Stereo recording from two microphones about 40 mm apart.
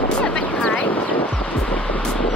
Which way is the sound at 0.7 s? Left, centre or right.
Left.